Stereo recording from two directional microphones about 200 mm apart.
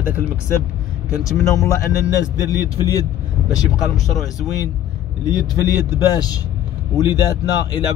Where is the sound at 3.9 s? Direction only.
Centre (ahead or behind).